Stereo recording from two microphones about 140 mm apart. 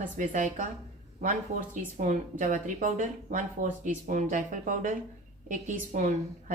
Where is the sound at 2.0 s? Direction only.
65° right (ahead or behind).